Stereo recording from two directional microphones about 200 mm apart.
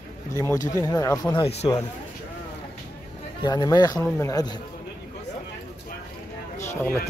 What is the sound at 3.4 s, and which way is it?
A man's voice, 20° left (ahead or behind).